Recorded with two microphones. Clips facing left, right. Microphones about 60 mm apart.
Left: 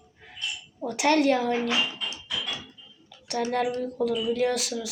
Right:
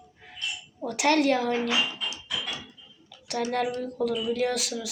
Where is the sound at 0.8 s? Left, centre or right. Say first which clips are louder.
Left 1 dB; centre.